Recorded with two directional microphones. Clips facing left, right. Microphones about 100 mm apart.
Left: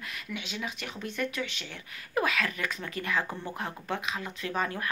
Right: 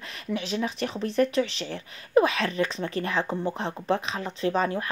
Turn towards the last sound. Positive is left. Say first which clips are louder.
# right 7 dB
turn(degrees=-25)  # may be behind; listen again after turning